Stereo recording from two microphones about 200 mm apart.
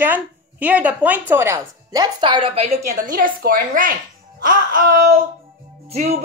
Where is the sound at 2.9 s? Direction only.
45° right (ahead or behind).